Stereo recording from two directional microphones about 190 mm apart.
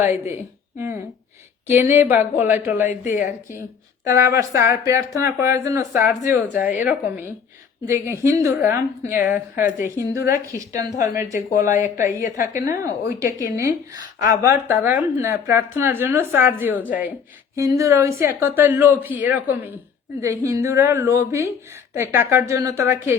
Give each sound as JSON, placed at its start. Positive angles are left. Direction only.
{"t": 0.0, "sound": "speech", "side_deg": -10}
{"t": 1.6, "sound": "speech", "side_deg": -10}
{"t": 4.0, "sound": "speech", "side_deg": -15}
{"t": 8.6, "sound": "speech", "side_deg": 45}
{"t": 9.2, "sound": "speech", "side_deg": -10}
{"t": 10.7, "sound": "speech", "side_deg": 45}
{"t": 12.4, "sound": "speech", "side_deg": -15}